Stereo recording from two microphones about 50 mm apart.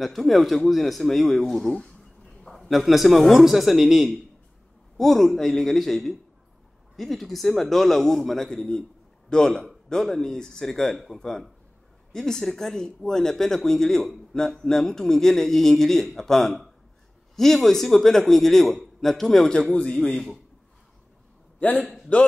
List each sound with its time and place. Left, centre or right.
0.0 s a man's voice: centre
21.8 s a man's voice: centre